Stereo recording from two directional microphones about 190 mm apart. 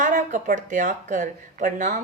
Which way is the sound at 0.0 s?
40° right (ahead or behind).